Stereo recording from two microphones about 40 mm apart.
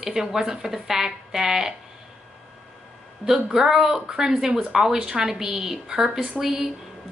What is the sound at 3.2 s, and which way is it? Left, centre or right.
A woman's voice, centre.